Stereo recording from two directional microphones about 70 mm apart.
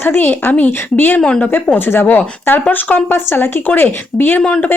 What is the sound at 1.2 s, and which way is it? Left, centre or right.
Speech, centre.